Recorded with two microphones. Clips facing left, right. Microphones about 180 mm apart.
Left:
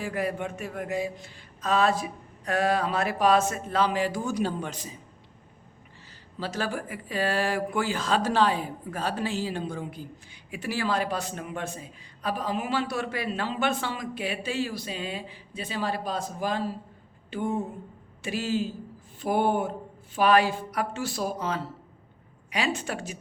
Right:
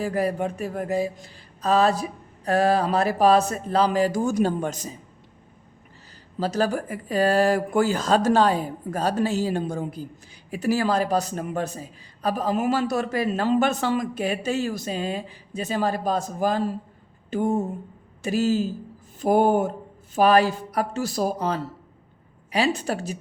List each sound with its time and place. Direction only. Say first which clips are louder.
0.0 s speech: right 5 dB; 35° right (ahead or behind)
6.4 s a man's voice: right 7 dB; 40° right (ahead or behind)